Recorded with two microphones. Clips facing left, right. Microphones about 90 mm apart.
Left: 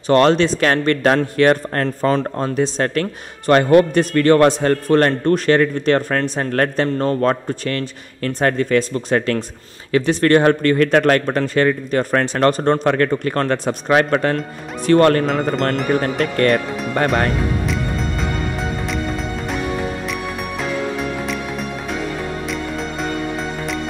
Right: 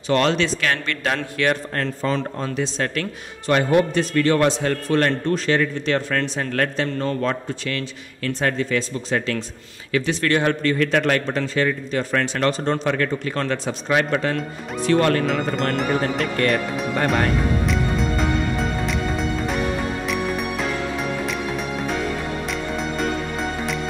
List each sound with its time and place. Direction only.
0.1 s speech: 45° left (ahead or behind)
20.1 s music: centre (ahead or behind)
22.5 s music: centre (ahead or behind)